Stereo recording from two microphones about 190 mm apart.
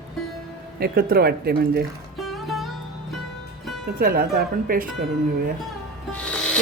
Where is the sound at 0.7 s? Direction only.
55° right (ahead or behind).